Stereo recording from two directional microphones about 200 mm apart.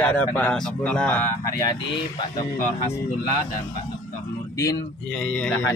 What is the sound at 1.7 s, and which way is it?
Speech, 20° left (ahead or behind).